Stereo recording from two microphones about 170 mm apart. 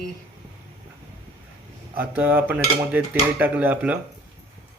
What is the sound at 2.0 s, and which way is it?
Cutlery, 10° right (ahead or behind).